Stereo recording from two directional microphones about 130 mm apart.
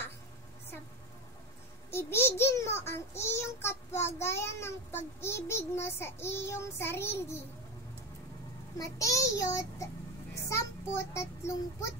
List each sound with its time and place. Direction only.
1.9 s a child's voice: 20° left (ahead or behind)
8.7 s a child's voice: 25° left (ahead or behind)